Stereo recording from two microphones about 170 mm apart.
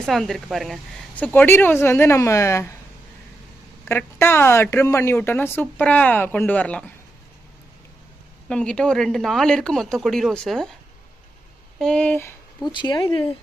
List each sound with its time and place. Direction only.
0.0 s speech: centre (ahead or behind); by 2.7 s 15° left (ahead or behind)
3.8 s speech: 15° left (ahead or behind)
8.4 s speech: 5° left (ahead or behind)
11.8 s speech: 5° left (ahead or behind)
12.6 s speech: 25° left (ahead or behind)